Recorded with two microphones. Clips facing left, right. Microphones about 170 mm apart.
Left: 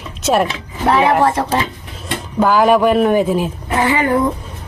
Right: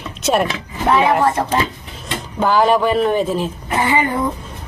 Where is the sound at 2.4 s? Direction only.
5° left (ahead or behind).